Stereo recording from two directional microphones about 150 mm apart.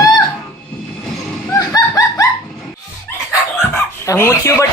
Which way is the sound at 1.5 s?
20° left (ahead or behind).